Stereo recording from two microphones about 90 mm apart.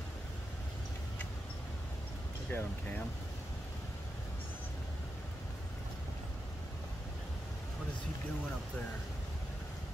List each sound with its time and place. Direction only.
2.5 s speech: 20° left (ahead or behind)